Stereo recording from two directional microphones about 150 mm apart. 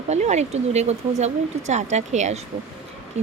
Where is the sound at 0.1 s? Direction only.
50° right (ahead or behind).